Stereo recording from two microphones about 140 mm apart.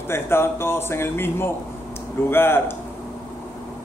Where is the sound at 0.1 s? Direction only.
15° left (ahead or behind).